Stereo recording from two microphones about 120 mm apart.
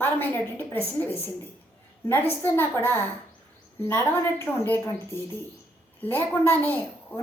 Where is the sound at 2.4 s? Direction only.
20° left (ahead or behind).